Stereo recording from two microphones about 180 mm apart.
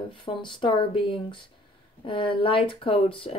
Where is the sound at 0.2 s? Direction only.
25° left (ahead or behind).